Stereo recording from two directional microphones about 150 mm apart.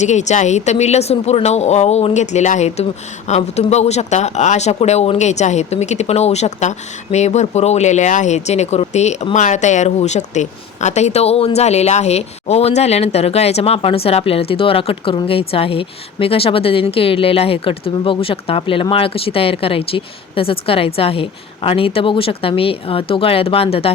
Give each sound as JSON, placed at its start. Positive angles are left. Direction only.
{"t": 0.0, "sound": "a woman's voice", "side_deg": 50}